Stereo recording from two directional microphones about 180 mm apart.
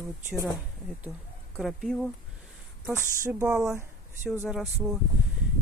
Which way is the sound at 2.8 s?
15° right (ahead or behind).